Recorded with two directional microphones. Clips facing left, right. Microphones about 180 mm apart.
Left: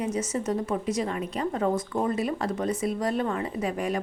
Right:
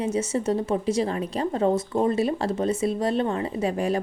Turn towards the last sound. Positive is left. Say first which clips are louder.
# right 4 dB
turn(degrees=-30)  # may be behind; listen again after turning